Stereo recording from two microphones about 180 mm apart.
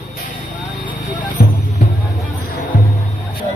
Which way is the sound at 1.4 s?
45° left (ahead or behind).